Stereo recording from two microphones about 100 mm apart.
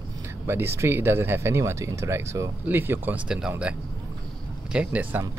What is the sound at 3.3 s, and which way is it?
Speech, 10° right (ahead or behind).